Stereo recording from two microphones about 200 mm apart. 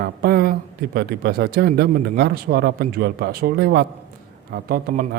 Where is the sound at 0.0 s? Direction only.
50° right (ahead or behind).